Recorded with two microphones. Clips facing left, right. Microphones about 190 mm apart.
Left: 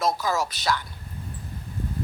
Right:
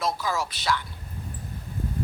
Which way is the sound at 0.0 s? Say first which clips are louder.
Left 3 dB; 40° left (ahead or behind).